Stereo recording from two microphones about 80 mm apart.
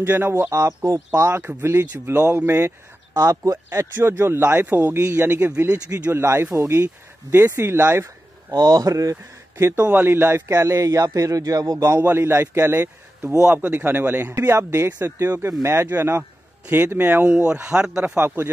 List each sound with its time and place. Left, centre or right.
0.0 s speech: right
3.2 s speech: right
3.9 s speech: right
8.5 s speech: right
12.0 s speech: right
13.4 s speech: centre
16.6 s a man's voice: right
18.1 s speech: right